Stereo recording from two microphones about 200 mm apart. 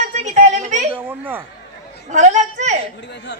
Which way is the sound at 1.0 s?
10° right (ahead or behind).